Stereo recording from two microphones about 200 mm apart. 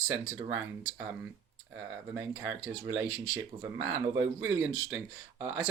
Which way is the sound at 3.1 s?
80° right.